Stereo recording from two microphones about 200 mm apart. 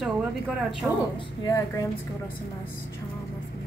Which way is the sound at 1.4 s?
15° left (ahead or behind).